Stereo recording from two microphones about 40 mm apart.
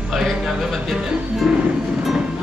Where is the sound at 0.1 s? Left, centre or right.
Centre.